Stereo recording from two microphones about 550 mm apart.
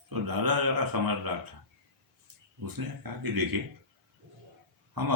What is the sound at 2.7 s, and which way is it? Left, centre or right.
Speech, right.